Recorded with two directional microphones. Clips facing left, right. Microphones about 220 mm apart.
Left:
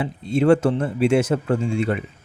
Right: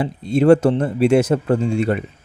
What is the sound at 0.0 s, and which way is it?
Speech, 40° right (ahead or behind).